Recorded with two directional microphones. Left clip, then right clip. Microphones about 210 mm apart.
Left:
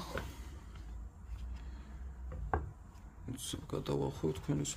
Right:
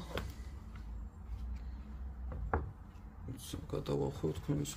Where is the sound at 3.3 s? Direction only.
20° left (ahead or behind).